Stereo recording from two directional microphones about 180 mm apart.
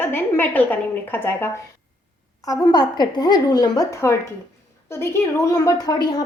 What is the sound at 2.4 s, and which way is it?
A woman's voice, 20° left (ahead or behind).